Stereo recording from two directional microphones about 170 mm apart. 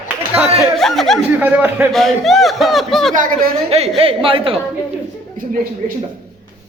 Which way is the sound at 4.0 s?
30° right (ahead or behind).